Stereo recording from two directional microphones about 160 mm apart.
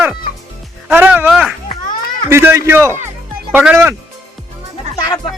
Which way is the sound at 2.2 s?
15° right (ahead or behind).